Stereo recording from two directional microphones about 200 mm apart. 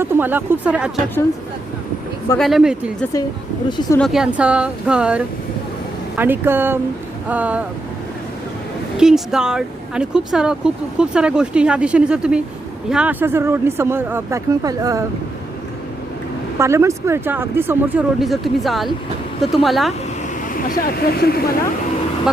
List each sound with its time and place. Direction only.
0.0 s speech: 10° right (ahead or behind)
2.4 s speech: centre (ahead or behind)
9.0 s speech: centre (ahead or behind); by 15.0 s 15° right (ahead or behind)
16.6 s speech: 15° right (ahead or behind)
20.7 s speech: 45° left (ahead or behind)